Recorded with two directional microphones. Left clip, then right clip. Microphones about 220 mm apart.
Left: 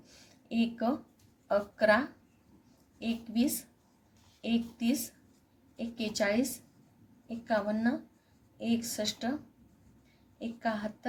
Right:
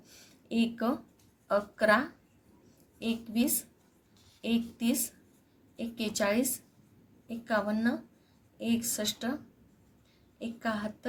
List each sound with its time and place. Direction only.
0.0 s a sound: 20° right (ahead or behind)
1.5 s a woman's voice: 20° right (ahead or behind)
10.4 s speech: 15° right (ahead or behind)